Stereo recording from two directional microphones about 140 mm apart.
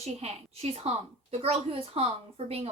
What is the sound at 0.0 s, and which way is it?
Speech, 50° right (ahead or behind).